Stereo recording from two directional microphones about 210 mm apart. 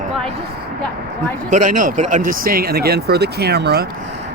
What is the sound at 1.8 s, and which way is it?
Speech, 35° right (ahead or behind).